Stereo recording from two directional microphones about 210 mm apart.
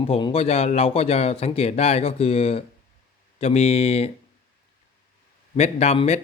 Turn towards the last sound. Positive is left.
turn(degrees=30)  # may be behind; listen again after turning